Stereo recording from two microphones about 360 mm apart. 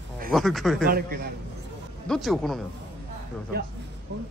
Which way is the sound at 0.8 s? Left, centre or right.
Right.